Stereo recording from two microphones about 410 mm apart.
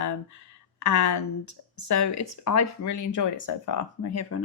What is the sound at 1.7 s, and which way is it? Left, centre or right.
Speech, left.